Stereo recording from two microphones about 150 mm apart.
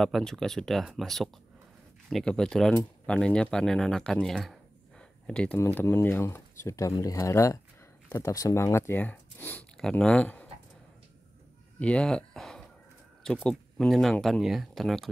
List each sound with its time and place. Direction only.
0.0 s speech: 5° left (ahead or behind)
11.8 s speech: 5° left (ahead or behind)